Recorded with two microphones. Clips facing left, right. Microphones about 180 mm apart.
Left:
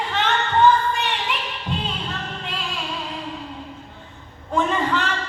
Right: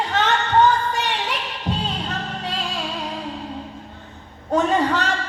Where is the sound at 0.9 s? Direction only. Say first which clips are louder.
Right 1 dB; 40° right (ahead or behind).